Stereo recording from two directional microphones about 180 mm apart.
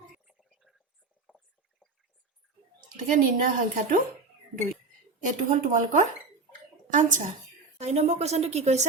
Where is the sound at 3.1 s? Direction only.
45° right (ahead or behind).